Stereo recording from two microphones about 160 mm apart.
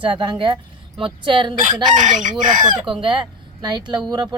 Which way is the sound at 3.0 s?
30° right (ahead or behind).